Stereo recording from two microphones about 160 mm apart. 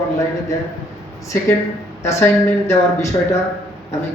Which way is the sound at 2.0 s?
15° left (ahead or behind).